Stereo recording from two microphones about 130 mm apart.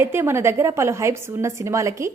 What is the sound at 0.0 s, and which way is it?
A woman's voice, 20° right (ahead or behind).